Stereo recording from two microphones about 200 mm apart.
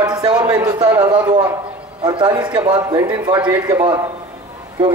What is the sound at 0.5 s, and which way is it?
Speech, 20° right (ahead or behind).